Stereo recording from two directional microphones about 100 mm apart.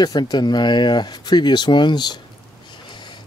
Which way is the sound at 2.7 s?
50° left (ahead or behind).